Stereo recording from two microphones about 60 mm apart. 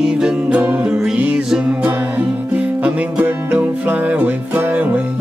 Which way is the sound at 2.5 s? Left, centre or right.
Right.